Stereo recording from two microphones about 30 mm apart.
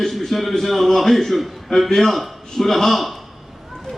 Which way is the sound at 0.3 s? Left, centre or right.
Centre.